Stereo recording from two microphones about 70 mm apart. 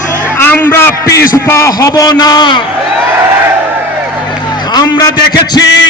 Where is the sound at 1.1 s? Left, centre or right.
Left.